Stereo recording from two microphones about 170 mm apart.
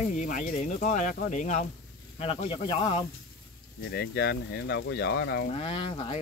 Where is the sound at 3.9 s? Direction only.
75° left (ahead or behind); by 5.5 s 90° left.